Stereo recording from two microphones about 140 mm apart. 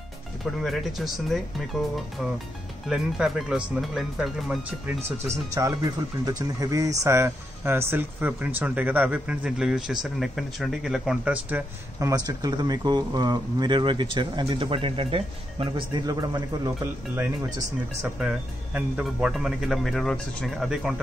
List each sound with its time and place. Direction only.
0.6 s speech: centre (ahead or behind)
2.9 s speech: 5° right (ahead or behind)
5.6 s speech: 25° right (ahead or behind); by 11.6 s 5° right (ahead or behind)
12.0 s speech: 25° right (ahead or behind)
18.0 s speech: 10° right (ahead or behind)